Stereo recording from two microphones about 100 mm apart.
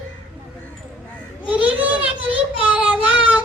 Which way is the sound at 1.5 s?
15° right (ahead or behind).